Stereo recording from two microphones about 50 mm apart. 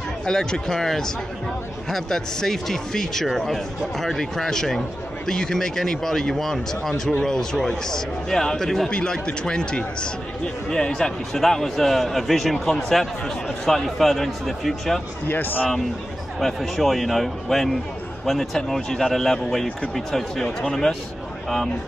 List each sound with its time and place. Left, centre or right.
0.2 s speech: centre
8.9 s speech: centre
15.2 s speech: left
16.3 s speech: centre